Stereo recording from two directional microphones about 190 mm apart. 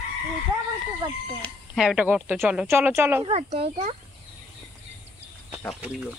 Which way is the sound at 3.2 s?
30° right (ahead or behind).